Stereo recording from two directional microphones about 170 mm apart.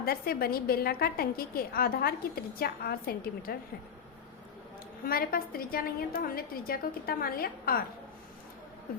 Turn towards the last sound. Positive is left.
turn(degrees=60)  # may be behind; listen again after turning